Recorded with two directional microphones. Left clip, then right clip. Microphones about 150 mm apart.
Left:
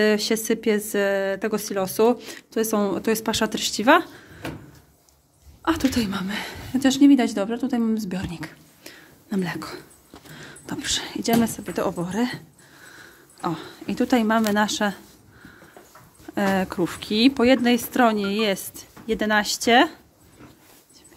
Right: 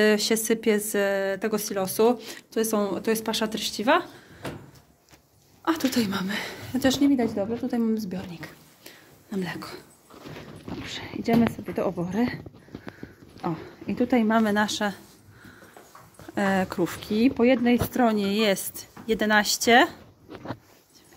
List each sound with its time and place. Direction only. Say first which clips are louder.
0.0 s a woman's voice: left 1 dB; 15° left (ahead or behind); by 4.5 s 35° left (ahead or behind)
5.7 s a woman's voice: left 2 dB; 15° left (ahead or behind)
13.4 s speech: left 3 dB; 20° left (ahead or behind)
14.3 s a woman's voice: left 2 dB; 10° left (ahead or behind)
16.3 s a woman's voice: left 2 dB; 15° left (ahead or behind)
17.2 s a woman's voice: left 3 dB; 35° left (ahead or behind)
17.8 s a woman's voice: left 4 dB; 10° left (ahead or behind)